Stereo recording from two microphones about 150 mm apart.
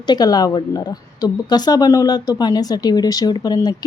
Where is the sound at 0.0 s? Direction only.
25° left (ahead or behind).